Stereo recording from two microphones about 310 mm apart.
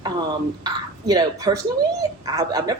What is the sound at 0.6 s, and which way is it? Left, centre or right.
Speech, centre.